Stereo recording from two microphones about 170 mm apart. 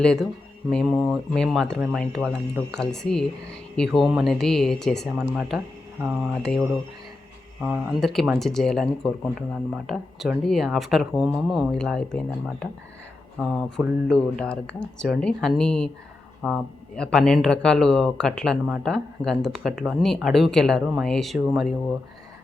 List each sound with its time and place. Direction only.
0.0 s speech: 5° left (ahead or behind)
7.6 s speech: 5° right (ahead or behind)